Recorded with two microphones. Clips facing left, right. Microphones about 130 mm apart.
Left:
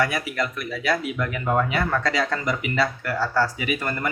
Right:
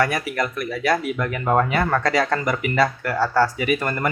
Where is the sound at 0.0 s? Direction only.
45° right (ahead or behind).